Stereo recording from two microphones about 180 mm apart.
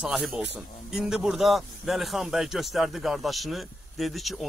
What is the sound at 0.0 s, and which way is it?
Speech, centre (ahead or behind).